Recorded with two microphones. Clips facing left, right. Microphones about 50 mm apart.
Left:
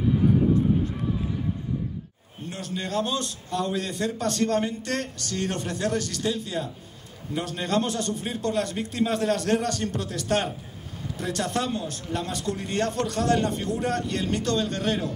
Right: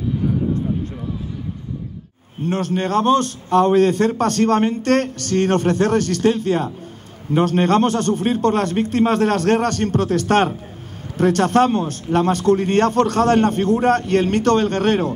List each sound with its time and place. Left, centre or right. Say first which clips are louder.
2.4 s a man's voice: right 12 dB; right